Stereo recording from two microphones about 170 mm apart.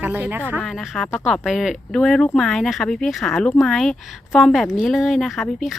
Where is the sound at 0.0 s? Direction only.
10° right (ahead or behind).